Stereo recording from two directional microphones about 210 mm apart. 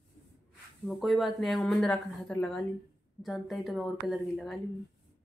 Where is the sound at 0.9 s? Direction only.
Centre (ahead or behind).